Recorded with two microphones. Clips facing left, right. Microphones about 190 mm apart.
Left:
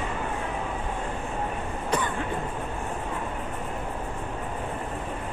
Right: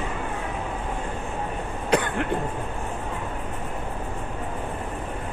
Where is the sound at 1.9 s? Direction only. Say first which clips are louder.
Right 5 dB; 70° right (ahead or behind).